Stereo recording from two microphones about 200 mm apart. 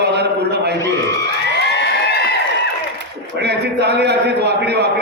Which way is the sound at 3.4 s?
55° right (ahead or behind).